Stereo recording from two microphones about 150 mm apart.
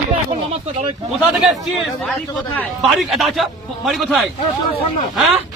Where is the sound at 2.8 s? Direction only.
Centre (ahead or behind).